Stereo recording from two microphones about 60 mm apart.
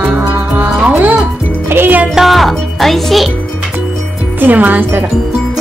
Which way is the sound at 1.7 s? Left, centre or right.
Right.